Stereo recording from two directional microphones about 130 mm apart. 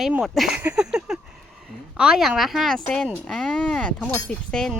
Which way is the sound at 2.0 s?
5° right (ahead or behind).